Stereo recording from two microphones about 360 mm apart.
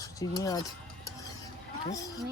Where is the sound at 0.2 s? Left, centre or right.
Centre.